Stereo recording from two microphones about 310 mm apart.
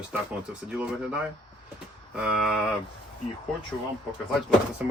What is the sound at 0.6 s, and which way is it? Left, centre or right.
Speech, centre.